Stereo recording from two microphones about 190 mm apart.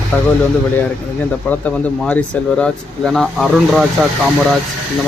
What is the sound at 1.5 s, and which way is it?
Speech, 10° left (ahead or behind).